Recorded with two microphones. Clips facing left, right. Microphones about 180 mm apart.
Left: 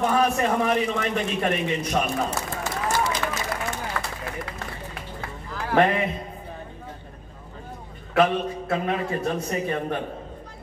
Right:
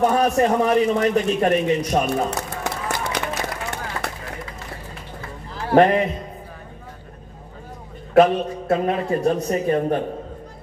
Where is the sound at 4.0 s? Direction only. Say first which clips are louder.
Right 2 dB; 20° right (ahead or behind).